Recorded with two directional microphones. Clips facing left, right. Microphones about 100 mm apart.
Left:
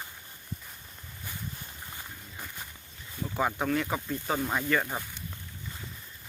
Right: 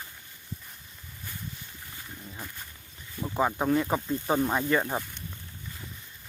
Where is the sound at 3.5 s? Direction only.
25° right (ahead or behind).